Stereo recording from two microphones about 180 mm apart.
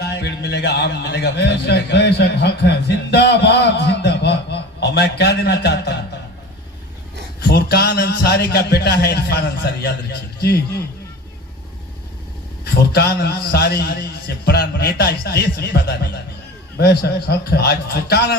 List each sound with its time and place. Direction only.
0.0 s speech: 65° left (ahead or behind)
7.4 s a man's voice: 60° left (ahead or behind)
12.6 s a man's voice: 60° left (ahead or behind)